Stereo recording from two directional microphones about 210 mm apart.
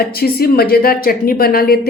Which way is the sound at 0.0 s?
45° left (ahead or behind).